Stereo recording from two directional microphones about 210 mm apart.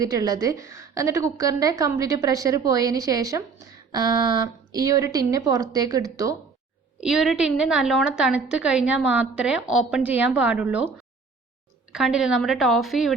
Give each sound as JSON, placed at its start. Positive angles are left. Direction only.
{"t": 0.0, "sound": "a woman's voice", "side_deg": -15}
{"t": 7.0, "sound": "a woman's voice", "side_deg": 0}
{"t": 11.9, "sound": "a woman's voice", "side_deg": -5}